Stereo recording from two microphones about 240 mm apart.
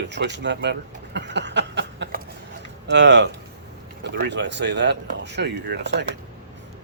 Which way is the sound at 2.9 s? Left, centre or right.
Right.